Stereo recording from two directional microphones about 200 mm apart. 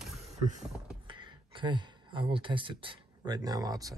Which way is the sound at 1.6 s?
25° right (ahead or behind).